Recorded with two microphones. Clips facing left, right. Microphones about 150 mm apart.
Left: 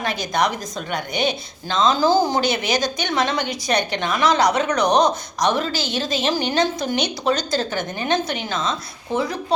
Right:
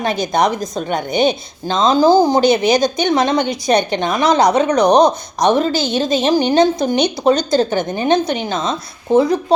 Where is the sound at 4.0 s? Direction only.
45° right (ahead or behind).